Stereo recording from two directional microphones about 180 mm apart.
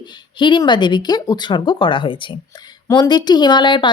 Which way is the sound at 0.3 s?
25° left (ahead or behind).